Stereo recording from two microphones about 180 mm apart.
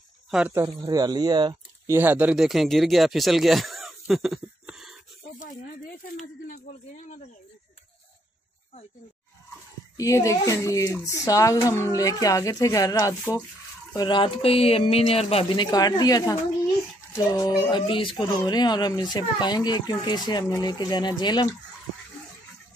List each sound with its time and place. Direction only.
0.6 s speech: 20° right (ahead or behind)
2.0 s speech: 10° right (ahead or behind)
9.9 s speech: 20° left (ahead or behind)